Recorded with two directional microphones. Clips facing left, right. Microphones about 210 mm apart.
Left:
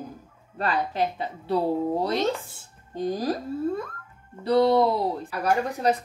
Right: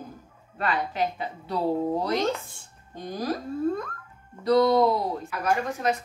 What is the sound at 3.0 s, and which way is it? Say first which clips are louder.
Speech: left 4 dB; 30° left (ahead or behind).